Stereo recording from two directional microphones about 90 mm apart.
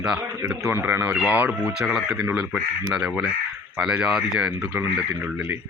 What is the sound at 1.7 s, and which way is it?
Speech, 5° right (ahead or behind).